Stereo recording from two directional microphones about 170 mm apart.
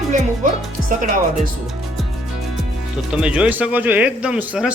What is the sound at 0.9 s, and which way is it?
Speech, 55° right (ahead or behind).